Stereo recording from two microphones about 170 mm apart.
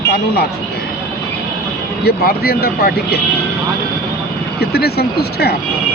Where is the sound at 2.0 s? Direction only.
65° left (ahead or behind).